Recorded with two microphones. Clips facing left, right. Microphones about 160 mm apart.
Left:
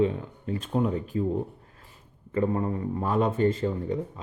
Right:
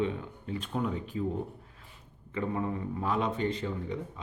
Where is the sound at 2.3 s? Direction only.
40° left (ahead or behind).